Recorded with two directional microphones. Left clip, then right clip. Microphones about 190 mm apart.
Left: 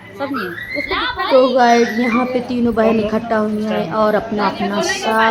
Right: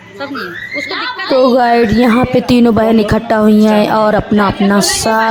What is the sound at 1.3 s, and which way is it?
Speech, 50° right (ahead or behind).